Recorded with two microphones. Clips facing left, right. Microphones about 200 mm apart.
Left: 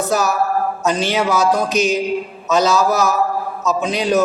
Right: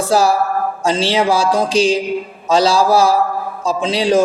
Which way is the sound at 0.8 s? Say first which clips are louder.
Right 5 dB; 30° right (ahead or behind).